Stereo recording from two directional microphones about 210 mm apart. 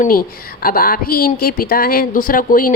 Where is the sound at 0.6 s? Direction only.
45° left (ahead or behind).